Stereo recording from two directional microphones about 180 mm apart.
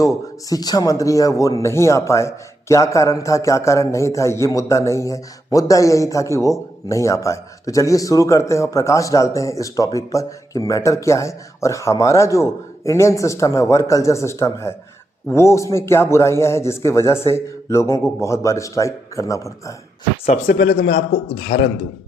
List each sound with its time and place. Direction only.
0.0 s speech: 20° left (ahead or behind)
20.5 s a man's voice: 60° left (ahead or behind)